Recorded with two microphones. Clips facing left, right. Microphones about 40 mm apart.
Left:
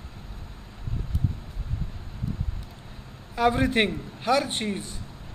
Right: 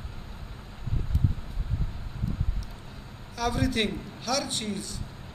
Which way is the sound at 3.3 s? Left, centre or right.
Left.